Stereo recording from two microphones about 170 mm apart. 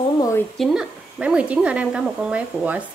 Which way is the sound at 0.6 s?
5° right (ahead or behind).